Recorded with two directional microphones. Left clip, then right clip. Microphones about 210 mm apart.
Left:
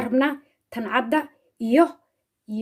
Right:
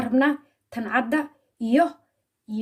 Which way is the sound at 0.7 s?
35° left (ahead or behind).